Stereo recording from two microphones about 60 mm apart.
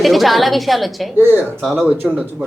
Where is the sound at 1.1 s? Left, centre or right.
Right.